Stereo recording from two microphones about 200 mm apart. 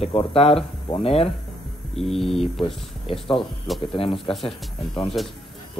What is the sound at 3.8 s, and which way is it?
A man's voice, 25° left (ahead or behind).